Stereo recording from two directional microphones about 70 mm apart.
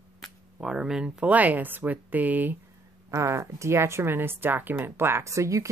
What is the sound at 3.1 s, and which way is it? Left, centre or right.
Speech, right.